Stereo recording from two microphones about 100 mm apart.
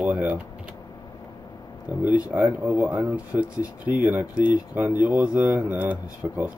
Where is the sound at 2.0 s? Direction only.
15° right (ahead or behind).